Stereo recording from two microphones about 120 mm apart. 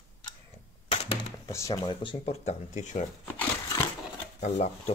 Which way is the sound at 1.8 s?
40° left (ahead or behind).